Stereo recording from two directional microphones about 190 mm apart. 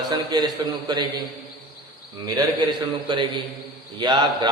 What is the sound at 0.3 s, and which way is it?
Speech, 20° right (ahead or behind).